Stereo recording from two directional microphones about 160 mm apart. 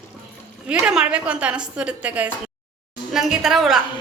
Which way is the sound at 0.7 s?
5° right (ahead or behind).